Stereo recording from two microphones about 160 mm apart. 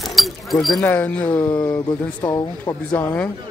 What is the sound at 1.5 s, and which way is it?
Speech, 25° left (ahead or behind).